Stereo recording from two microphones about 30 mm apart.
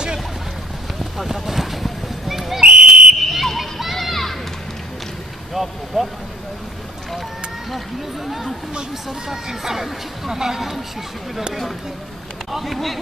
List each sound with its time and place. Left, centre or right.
1.1 s clip-clop: centre
2.6 s a sound: right
3.2 s fire alarm: centre
3.9 s music: centre
5.5 s vehicle: centre
9.3 s speech: centre
12.4 s speech: centre